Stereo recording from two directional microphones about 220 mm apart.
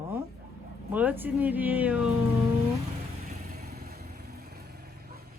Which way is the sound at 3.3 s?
40° right (ahead or behind).